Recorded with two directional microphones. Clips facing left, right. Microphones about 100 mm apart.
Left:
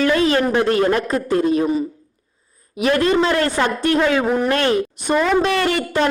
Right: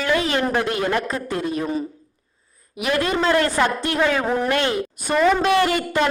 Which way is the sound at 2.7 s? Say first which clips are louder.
Left 5 dB; 30° left (ahead or behind).